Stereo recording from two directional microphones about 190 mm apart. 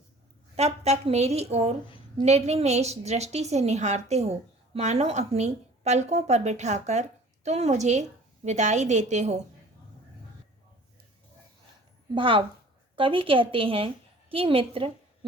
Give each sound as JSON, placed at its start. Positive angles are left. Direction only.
{"t": 0.5, "sound": "a woman's voice", "side_deg": -35}
{"t": 12.1, "sound": "a woman's voice", "side_deg": -25}